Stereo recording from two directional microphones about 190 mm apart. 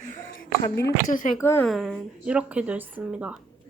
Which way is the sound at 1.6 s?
Centre (ahead or behind).